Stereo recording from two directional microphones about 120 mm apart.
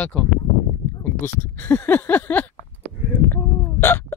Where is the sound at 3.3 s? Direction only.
20° left (ahead or behind).